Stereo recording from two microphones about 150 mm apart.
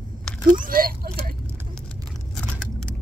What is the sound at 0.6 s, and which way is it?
Speech, 70° right (ahead or behind).